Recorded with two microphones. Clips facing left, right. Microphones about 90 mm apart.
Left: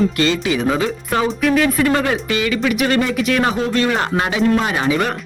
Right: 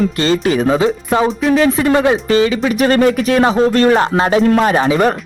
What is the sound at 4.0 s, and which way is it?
Speech, 30° right (ahead or behind).